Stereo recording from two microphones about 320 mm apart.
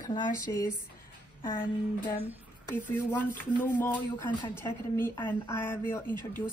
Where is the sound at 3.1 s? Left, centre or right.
Centre.